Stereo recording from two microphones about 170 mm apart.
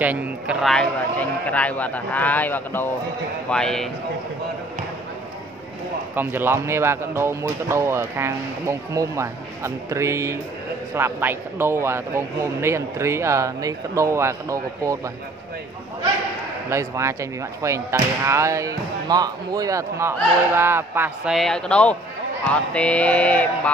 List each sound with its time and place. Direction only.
0.0 s speech: 10° right (ahead or behind)
6.1 s speech: 10° right (ahead or behind)
16.7 s speech: 15° right (ahead or behind)
21.4 s speech: 5° left (ahead or behind)